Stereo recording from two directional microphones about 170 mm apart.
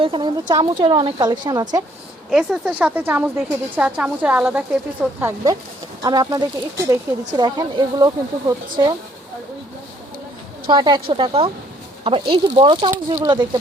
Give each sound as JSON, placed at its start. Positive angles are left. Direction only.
{"t": 0.0, "sound": "speech", "side_deg": -30}
{"t": 2.3, "sound": "speech", "side_deg": -5}
{"t": 6.0, "sound": "speech", "side_deg": -20}
{"t": 10.7, "sound": "speech", "side_deg": -25}